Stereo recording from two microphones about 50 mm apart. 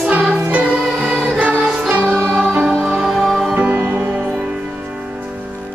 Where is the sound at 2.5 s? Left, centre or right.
Right.